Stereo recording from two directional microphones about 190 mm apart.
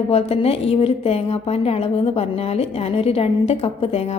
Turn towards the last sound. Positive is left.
turn(degrees=35)  # may be behind; listen again after turning